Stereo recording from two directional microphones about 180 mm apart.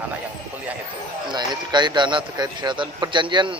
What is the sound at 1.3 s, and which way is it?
Speech, 25° right (ahead or behind).